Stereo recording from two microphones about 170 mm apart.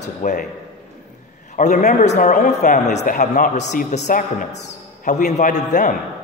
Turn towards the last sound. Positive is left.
turn(degrees=45)  # may be behind; listen again after turning